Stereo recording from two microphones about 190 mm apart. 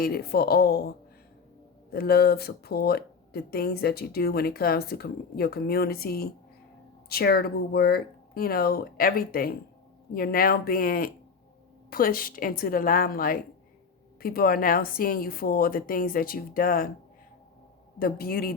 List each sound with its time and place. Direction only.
0.0 s a woman's voice: 55° left (ahead or behind)
18.0 s a woman's voice: 50° left (ahead or behind)